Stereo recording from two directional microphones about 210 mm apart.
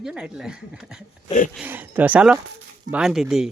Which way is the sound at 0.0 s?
5° right (ahead or behind).